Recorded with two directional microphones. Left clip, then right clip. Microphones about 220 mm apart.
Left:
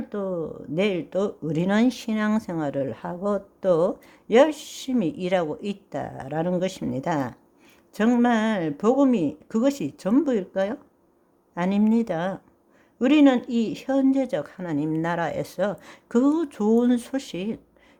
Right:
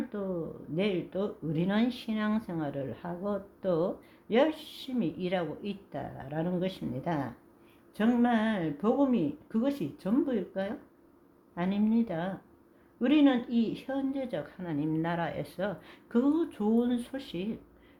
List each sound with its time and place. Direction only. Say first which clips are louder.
0.7 s speech: left 7 dB; 50° left (ahead or behind)